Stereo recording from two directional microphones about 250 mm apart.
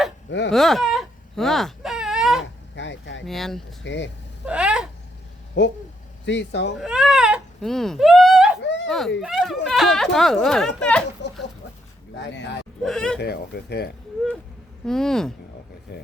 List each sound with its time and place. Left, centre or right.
0.3 s speech: left
0.5 s baby cry: centre
2.7 s speech: left
3.2 s speech: centre
3.8 s speech: left
4.4 s a sound: centre
5.6 s speech: left
6.7 s speech: centre
8.6 s a sound: left
8.9 s speech: centre
12.2 s speech: left
12.8 s speech: centre
13.1 s speech: left
14.8 s speech: centre